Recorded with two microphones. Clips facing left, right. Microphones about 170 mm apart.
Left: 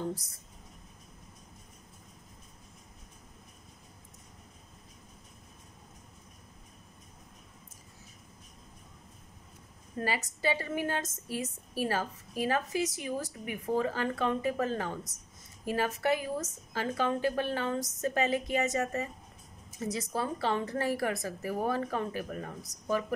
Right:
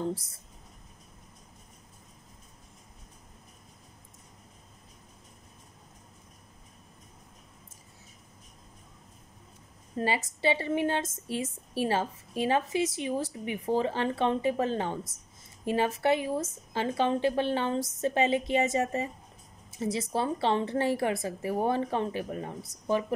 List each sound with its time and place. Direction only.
0.1 s a woman's voice: 30° right (ahead or behind)
9.9 s a woman's voice: 25° right (ahead or behind)